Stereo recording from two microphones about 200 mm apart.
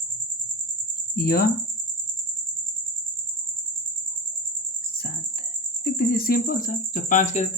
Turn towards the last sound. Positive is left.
turn(degrees=40)  # may be behind; listen again after turning